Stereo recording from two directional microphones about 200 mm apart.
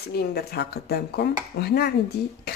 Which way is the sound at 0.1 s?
50° left (ahead or behind).